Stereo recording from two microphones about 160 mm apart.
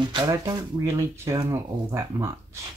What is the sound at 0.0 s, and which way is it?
Speech, 25° right (ahead or behind).